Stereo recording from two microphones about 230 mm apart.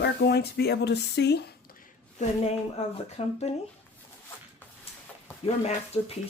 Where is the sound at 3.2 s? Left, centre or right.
Left.